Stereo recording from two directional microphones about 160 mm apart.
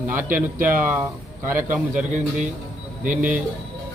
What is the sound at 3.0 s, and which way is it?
Speech, 55° right (ahead or behind).